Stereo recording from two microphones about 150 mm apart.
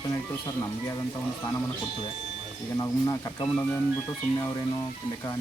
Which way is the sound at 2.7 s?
25° left (ahead or behind).